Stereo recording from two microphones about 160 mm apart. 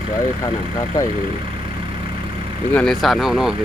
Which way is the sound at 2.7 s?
5° left (ahead or behind).